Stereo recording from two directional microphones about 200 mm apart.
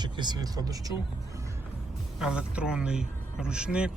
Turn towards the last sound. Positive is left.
turn(degrees=-5)  # may be behind; listen again after turning